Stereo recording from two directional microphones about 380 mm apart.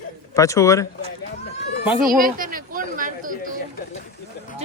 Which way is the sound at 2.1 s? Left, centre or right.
Right.